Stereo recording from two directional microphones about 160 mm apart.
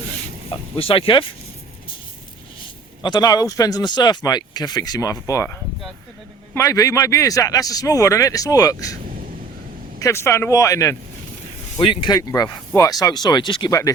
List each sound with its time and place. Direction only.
0.5 s speech: 35° left (ahead or behind)
3.0 s speech: 25° left (ahead or behind)
10.0 s speech: 20° left (ahead or behind)
11.8 s speech: 30° left (ahead or behind)